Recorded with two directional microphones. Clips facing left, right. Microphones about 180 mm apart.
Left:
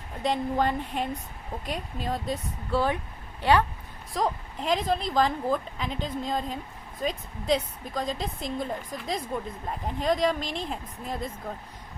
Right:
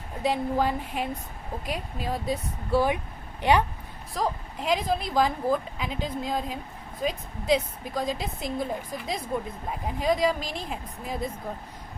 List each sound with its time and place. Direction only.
0.2 s speech: 5° right (ahead or behind)
4.1 s speech: centre (ahead or behind)